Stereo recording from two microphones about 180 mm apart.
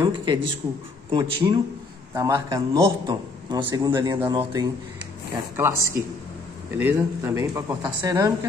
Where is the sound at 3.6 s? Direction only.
15° right (ahead or behind).